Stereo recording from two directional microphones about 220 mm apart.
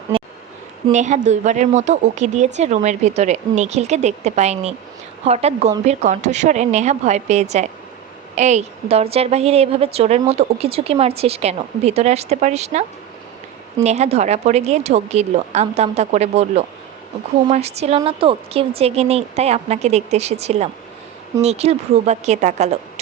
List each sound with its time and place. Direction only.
0.1 s a sound: 25° right (ahead or behind)
0.9 s a woman's voice: 35° right (ahead or behind)
13.8 s a woman's voice: 30° right (ahead or behind)